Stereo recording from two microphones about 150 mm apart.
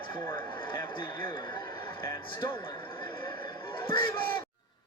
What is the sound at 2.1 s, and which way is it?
Speech, 35° left (ahead or behind).